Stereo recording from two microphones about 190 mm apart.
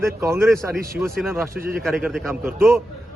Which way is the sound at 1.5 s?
50° right (ahead or behind).